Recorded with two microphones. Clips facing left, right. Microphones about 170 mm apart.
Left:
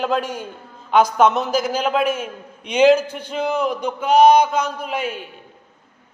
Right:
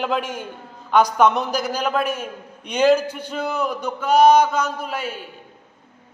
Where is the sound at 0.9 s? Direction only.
5° left (ahead or behind).